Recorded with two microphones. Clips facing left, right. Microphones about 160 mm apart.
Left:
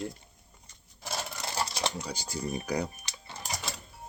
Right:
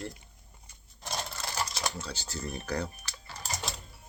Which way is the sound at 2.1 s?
10° left (ahead or behind).